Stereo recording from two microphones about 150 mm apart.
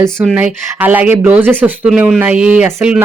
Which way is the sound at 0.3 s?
10° right (ahead or behind).